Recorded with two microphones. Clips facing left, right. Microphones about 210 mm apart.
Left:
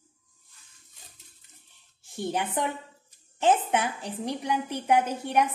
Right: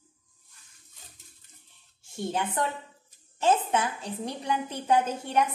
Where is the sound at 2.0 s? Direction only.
15° left (ahead or behind).